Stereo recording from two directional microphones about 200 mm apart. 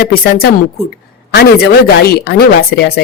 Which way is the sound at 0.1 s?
50° left (ahead or behind).